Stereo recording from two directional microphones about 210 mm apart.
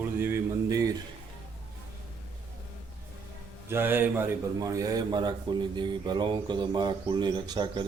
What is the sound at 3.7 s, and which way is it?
A man's voice, 10° right (ahead or behind).